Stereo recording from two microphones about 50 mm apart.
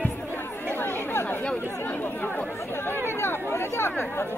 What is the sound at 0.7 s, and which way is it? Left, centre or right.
Chatter, left.